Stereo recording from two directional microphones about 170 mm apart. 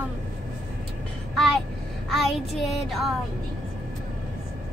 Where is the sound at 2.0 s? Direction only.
Centre (ahead or behind).